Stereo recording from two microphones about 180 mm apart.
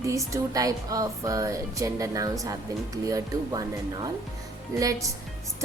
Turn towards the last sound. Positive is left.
turn(degrees=-15)  # may be behind; listen again after turning